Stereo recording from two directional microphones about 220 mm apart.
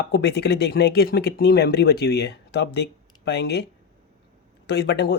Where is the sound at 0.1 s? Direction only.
50° left (ahead or behind).